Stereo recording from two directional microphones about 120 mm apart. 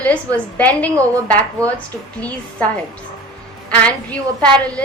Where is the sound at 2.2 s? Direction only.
10° left (ahead or behind).